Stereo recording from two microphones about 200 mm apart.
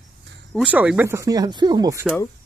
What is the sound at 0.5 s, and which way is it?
Speech, 5° right (ahead or behind).